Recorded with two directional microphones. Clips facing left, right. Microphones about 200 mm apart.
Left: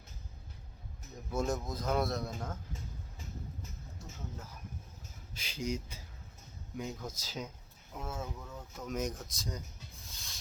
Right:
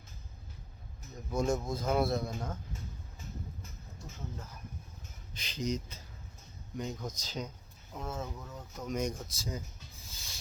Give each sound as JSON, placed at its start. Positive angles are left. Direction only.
{"t": 1.3, "sound": "speech", "side_deg": 5}
{"t": 5.3, "sound": "speech", "side_deg": 10}